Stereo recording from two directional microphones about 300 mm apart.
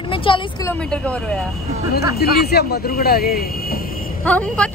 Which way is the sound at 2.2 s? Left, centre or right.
Left.